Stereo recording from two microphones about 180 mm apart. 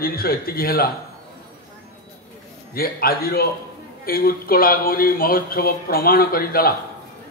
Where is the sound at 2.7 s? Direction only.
55° left (ahead or behind).